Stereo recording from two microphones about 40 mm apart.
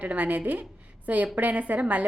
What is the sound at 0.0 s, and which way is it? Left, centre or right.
A woman's voice, right.